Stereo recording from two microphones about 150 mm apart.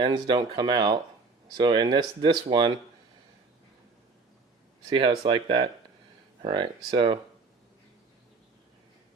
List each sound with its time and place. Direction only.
0.0 s speech: 30° right (ahead or behind)
4.9 s speech: 35° right (ahead or behind)